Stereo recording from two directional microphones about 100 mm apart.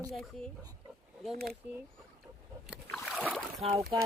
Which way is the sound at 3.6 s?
75° right (ahead or behind).